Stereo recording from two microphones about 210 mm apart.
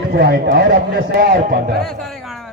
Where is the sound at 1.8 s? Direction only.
Centre (ahead or behind).